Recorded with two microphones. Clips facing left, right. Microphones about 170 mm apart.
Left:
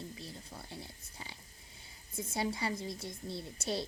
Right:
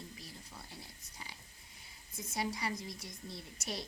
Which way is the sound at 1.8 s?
30° left (ahead or behind).